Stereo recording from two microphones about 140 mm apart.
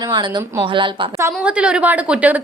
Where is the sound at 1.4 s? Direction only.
10° right (ahead or behind).